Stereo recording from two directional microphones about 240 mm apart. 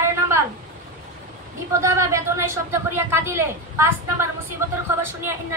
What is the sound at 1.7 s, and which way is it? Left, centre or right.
Speech, centre.